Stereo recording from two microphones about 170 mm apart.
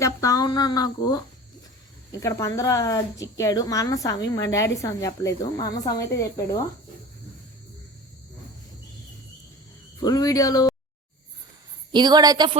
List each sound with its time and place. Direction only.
0.0 s speech: 20° left (ahead or behind)
10.0 s speech: 25° left (ahead or behind)
11.9 s a woman's voice: 25° right (ahead or behind)